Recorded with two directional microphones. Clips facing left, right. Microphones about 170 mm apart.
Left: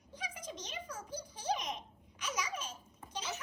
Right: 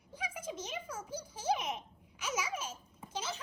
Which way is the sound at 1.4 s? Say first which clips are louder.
Right 3 dB; 10° right (ahead or behind).